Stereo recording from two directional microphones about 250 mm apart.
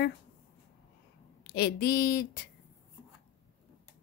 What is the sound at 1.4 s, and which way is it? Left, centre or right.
A woman's voice, left.